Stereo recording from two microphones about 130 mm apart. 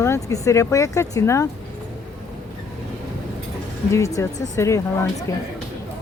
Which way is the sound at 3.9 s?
25° left (ahead or behind).